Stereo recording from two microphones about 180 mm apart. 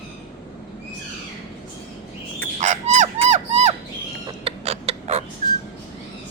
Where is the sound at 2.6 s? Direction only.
40° right (ahead or behind).